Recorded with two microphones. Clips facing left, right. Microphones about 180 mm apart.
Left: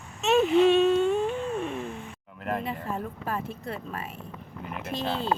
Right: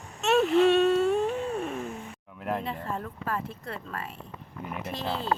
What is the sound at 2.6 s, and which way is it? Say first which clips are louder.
Speech: left 1 dB; 10° left (ahead or behind).